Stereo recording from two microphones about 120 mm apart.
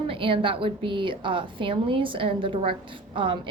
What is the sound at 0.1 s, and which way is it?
A woman's voice, 50° right (ahead or behind).